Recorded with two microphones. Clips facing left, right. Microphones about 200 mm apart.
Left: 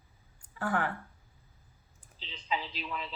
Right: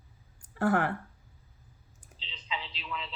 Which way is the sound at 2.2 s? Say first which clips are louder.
Left 4 dB; 45° left (ahead or behind).